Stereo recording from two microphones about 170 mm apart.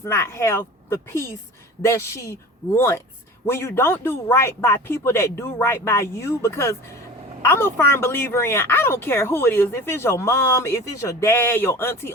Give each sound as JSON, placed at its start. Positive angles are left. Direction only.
{"t": 0.0, "sound": "a woman's voice", "side_deg": 15}